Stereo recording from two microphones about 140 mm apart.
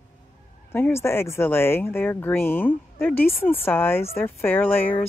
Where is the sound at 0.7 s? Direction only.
15° left (ahead or behind).